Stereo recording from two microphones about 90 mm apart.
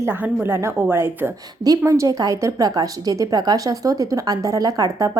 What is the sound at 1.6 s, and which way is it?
A woman's voice, 40° right (ahead or behind).